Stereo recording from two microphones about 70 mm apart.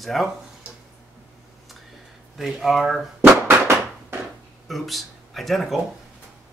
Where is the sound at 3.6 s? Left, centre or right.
Right.